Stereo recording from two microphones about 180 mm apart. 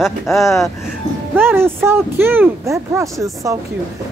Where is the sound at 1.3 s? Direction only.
10° right (ahead or behind).